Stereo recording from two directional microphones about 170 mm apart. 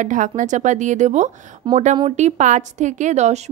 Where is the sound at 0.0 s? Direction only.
50° right (ahead or behind).